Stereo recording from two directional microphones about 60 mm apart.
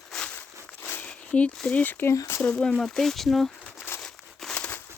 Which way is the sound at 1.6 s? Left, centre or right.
Left.